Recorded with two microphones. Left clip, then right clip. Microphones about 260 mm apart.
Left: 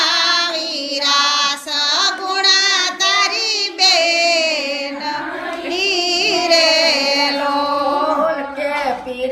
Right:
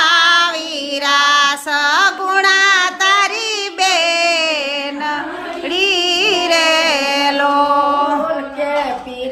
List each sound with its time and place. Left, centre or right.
0.0 s child singing: centre
1.0 s music: centre
5.7 s child singing: centre